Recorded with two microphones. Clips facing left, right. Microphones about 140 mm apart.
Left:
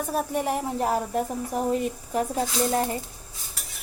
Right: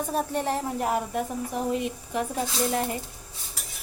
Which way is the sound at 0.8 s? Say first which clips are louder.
Left 2 dB; 35° left (ahead or behind).